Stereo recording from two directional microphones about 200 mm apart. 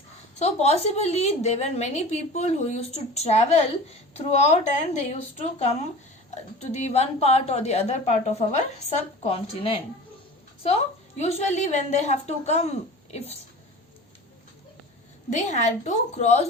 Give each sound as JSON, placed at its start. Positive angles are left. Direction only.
{"t": 0.3, "sound": "a woman's voice", "side_deg": 35}
{"t": 11.2, "sound": "a woman's voice", "side_deg": 35}
{"t": 15.3, "sound": "a woman's voice", "side_deg": 35}